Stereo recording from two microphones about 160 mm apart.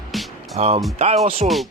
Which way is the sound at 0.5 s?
40° right (ahead or behind).